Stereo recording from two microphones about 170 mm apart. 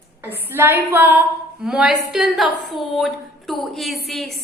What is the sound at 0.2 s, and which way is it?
A woman's voice, 10° right (ahead or behind).